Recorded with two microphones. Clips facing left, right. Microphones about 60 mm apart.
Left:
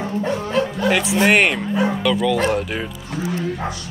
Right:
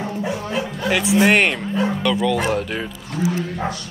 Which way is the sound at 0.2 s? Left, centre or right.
Centre.